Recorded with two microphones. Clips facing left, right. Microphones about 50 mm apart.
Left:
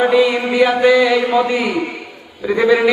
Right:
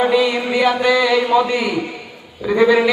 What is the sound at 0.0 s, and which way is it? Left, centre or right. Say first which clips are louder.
A man's voice: left 2 dB; centre.